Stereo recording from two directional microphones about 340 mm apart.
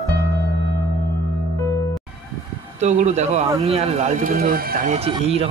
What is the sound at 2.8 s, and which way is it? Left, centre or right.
Speech, centre.